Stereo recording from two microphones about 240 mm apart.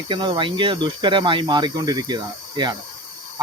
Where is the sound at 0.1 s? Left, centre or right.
Centre.